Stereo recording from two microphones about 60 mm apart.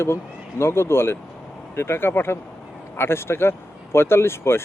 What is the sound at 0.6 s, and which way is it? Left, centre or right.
Speech, left.